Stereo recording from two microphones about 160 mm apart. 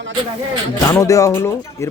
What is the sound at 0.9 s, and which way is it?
Speech, 20° left (ahead or behind).